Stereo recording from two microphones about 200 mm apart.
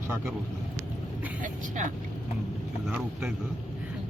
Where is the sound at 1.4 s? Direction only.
40° right (ahead or behind).